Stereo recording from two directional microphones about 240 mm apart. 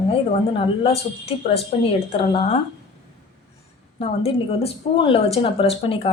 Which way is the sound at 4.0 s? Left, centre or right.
Left.